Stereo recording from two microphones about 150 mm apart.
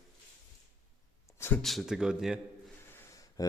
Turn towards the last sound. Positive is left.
turn(degrees=25)  # may be behind; listen again after turning